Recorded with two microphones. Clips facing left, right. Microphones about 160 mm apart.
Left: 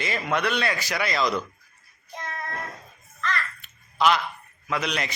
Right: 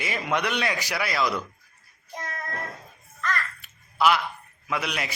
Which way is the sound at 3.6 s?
10° right (ahead or behind).